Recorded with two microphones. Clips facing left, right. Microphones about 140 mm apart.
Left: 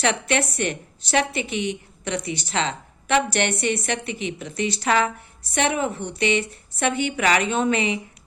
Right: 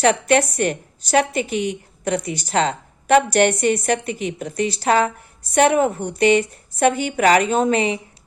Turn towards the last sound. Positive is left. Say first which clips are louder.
# right 4 dB
turn(degrees=-40)  # may be behind; listen again after turning